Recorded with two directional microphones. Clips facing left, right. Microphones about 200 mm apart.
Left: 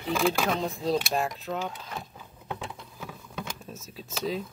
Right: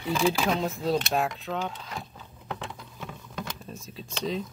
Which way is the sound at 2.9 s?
5° left (ahead or behind).